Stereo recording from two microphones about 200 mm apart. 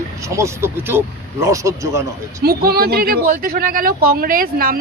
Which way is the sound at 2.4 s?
50° right (ahead or behind).